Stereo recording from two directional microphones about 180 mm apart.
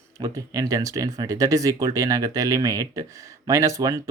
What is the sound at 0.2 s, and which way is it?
Speech, 20° right (ahead or behind).